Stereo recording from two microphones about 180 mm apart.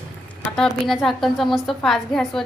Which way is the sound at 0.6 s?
Centre (ahead or behind).